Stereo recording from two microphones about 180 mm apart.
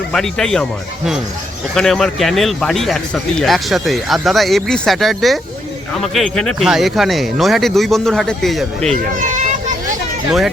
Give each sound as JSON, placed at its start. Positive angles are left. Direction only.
{"t": 0.1, "sound": "speech", "side_deg": 5}
{"t": 8.9, "sound": "speech", "side_deg": -40}